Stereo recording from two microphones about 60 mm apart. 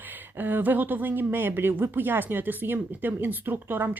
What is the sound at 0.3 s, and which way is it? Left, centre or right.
Speech, right.